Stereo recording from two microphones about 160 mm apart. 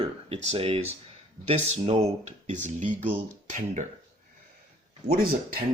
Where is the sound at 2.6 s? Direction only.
55° right (ahead or behind).